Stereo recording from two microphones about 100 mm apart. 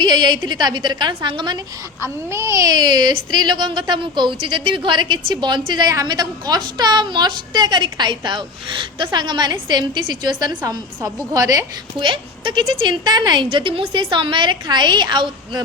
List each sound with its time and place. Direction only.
0.0 s speech: 45° right (ahead or behind)
2.3 s speech: 30° right (ahead or behind)
11.9 s speech: 55° right (ahead or behind)